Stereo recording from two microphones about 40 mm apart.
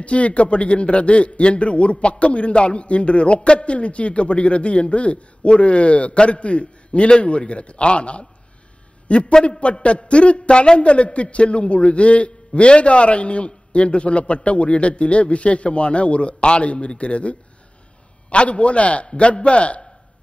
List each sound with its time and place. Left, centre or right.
0.0 s a man's voice: left